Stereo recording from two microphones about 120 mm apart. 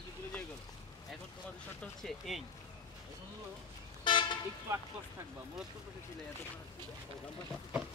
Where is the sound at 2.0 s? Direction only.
Centre (ahead or behind).